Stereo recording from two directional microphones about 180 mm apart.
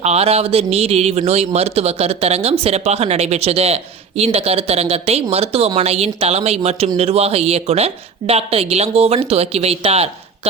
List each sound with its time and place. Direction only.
0.0 s a woman's voice: 35° right (ahead or behind)